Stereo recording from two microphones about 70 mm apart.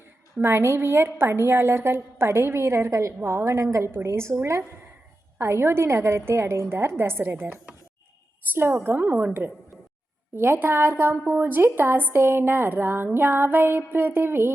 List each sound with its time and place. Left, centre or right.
0.4 s a woman's voice: right